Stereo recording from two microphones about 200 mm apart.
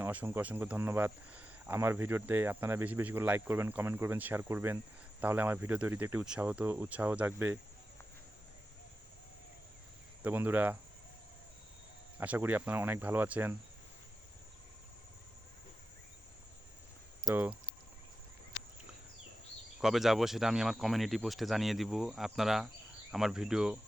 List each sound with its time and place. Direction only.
0.0 s speech: 10° right (ahead or behind)
10.2 s speech: 10° right (ahead or behind)
12.2 s speech: 10° right (ahead or behind)
17.2 s speech: 10° right (ahead or behind)
19.8 s speech: centre (ahead or behind)